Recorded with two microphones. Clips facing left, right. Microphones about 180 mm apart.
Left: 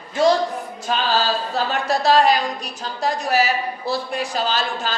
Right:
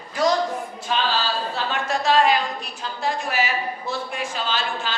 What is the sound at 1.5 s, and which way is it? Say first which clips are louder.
A woman's voice: left 4 dB; 35° left (ahead or behind).